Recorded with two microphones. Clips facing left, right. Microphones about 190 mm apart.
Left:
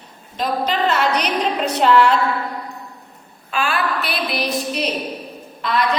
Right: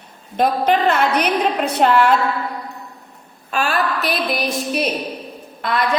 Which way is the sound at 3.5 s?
40° right (ahead or behind).